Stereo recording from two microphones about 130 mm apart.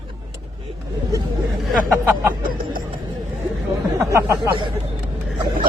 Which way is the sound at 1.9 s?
15° right (ahead or behind).